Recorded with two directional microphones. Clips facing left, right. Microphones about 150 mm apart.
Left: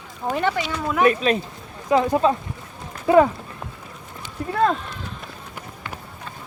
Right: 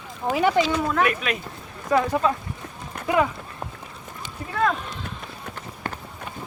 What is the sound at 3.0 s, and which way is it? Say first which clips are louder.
Run: left 6 dB; 55° right (ahead or behind).